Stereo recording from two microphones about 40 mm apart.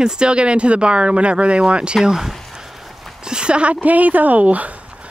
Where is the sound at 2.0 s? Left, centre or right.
Centre; by 4.7 s right.